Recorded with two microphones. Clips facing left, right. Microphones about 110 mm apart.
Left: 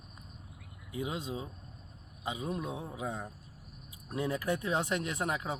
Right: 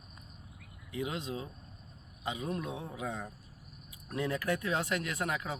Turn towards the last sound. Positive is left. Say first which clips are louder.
# left 1 dB
turn(degrees=20)  # may be behind; listen again after turning